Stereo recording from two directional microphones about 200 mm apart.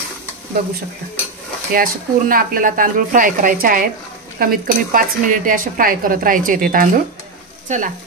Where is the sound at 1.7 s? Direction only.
45° right (ahead or behind).